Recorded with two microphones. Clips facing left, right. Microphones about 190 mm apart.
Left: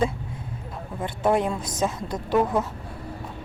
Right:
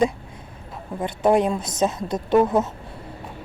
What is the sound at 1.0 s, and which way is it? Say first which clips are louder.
A woman's voice: right 4 dB; 20° right (ahead or behind).